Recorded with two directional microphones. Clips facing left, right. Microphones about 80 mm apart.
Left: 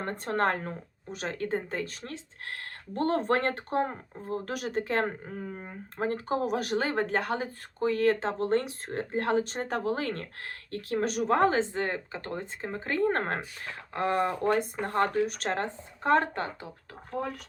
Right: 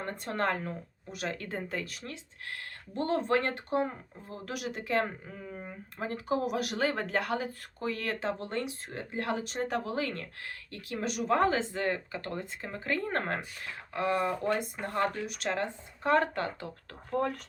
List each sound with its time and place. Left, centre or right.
0.0 s speech: left
17.1 s speech: centre